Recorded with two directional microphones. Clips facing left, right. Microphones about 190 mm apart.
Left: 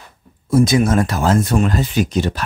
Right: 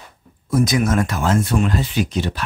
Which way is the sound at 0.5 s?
30° left (ahead or behind).